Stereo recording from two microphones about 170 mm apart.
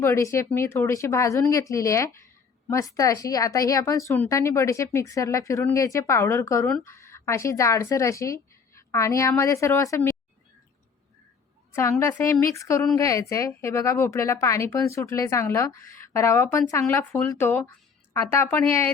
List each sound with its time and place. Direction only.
0.0 s a woman's voice: 15° left (ahead or behind)
11.7 s a woman's voice: 15° left (ahead or behind)